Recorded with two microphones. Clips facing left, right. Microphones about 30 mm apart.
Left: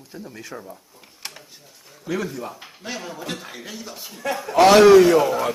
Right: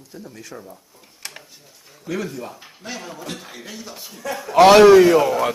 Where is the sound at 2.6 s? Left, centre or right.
Centre.